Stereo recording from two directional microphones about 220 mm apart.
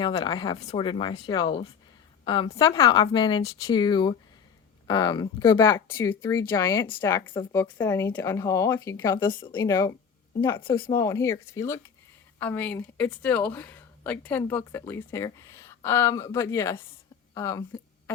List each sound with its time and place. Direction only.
0.0 s a woman's voice: 20° left (ahead or behind)
10.9 s speech: 10° left (ahead or behind)